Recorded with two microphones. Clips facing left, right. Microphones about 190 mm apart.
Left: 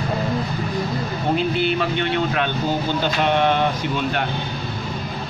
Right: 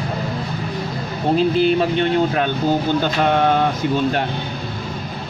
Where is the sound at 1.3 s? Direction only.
35° right (ahead or behind).